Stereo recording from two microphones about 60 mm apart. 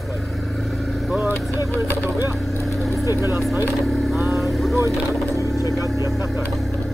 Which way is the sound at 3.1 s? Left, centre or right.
Right.